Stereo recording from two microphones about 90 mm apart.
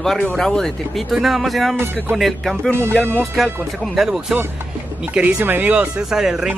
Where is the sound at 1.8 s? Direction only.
20° right (ahead or behind).